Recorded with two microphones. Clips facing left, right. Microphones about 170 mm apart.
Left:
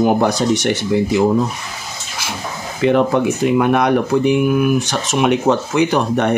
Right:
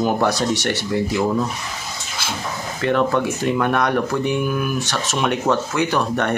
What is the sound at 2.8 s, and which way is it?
Speech, 15° left (ahead or behind).